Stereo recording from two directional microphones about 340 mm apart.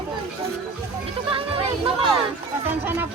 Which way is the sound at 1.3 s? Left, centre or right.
Centre.